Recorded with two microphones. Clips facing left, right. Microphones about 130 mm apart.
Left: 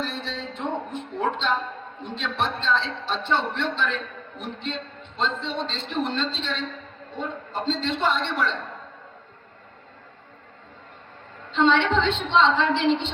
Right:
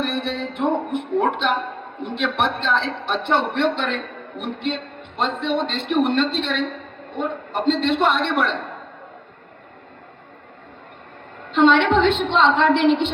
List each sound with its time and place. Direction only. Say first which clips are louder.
0.0 s a sound: right 7 dB; 60° right (ahead or behind)
0.9 s a man's voice: right 7 dB; 60° right (ahead or behind)
11.4 s a woman's voice: right 5 dB; 60° right (ahead or behind)